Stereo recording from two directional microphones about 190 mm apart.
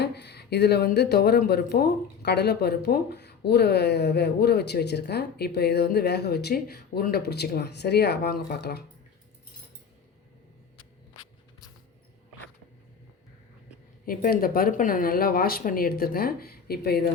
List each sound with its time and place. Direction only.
0.0 s speech: 60° left (ahead or behind)
14.0 s speech: 50° left (ahead or behind)